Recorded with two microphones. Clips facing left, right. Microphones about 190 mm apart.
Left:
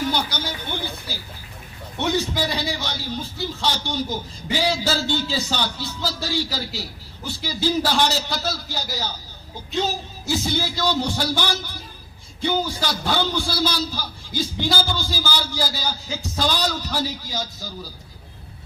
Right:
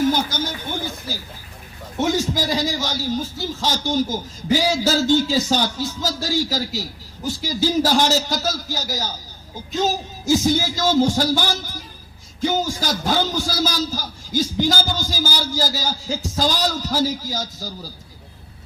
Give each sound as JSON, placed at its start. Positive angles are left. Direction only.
{"t": 0.1, "sound": "a man's voice", "side_deg": -45}